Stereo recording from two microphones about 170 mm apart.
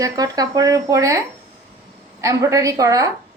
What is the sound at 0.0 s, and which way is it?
Speech, 20° right (ahead or behind).